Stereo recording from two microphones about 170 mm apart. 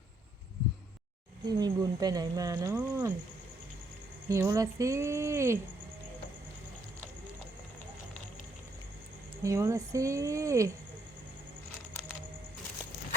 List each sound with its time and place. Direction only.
1.5 s speech: 25° right (ahead or behind)
4.3 s speech: 20° right (ahead or behind)
9.4 s speech: 15° right (ahead or behind)